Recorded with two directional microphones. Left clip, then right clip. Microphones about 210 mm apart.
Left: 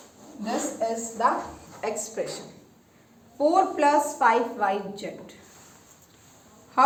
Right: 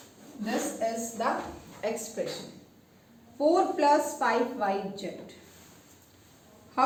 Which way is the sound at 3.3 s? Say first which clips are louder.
Left 3 dB; 40° left (ahead or behind).